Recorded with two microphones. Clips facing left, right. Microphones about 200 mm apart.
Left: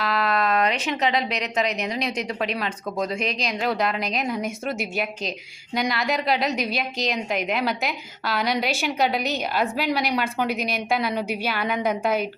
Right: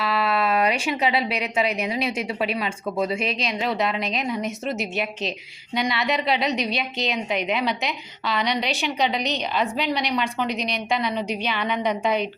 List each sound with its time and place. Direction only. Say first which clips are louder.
0.0 s a woman's voice: even; 5° right (ahead or behind)